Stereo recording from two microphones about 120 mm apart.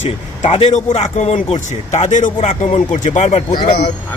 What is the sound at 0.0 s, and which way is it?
Speech, 55° left (ahead or behind).